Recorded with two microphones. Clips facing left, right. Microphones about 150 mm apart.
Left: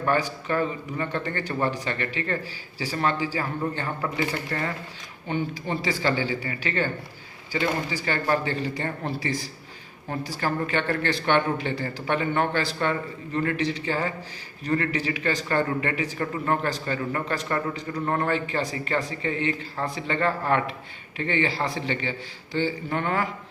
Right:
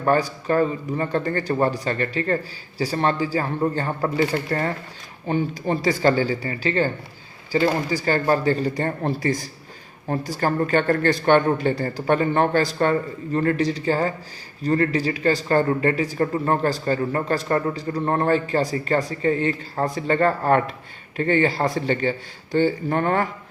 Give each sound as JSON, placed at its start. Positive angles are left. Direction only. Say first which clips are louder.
{"t": 0.0, "sound": "a man's voice", "louder": "right 4 dB", "side_deg": -35}